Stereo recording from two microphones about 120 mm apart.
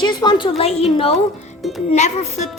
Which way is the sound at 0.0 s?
40° left (ahead or behind).